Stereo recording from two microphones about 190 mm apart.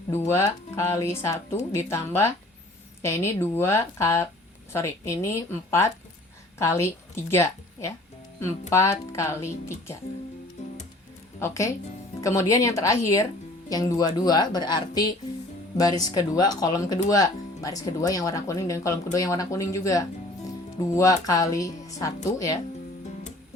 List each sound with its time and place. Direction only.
0.1 s a woman's voice: 15° left (ahead or behind)
11.3 s speech: 15° left (ahead or behind)